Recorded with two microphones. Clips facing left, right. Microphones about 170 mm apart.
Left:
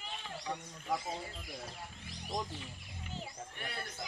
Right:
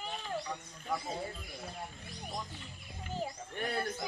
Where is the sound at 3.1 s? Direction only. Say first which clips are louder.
Right 7 dB; 45° right (ahead or behind).